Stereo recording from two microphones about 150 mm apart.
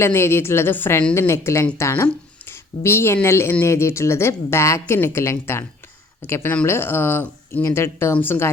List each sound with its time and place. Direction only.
0.0 s speech: 15° left (ahead or behind)